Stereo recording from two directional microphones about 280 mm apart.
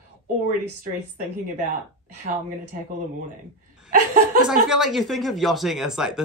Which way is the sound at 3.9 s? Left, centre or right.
Right.